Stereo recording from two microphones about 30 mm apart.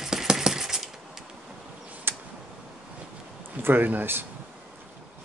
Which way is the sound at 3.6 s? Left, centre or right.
Right.